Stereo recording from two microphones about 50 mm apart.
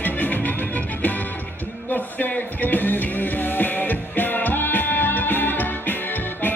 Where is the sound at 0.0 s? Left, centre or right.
Left.